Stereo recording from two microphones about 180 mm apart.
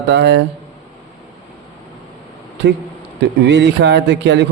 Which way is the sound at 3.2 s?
75° right (ahead or behind).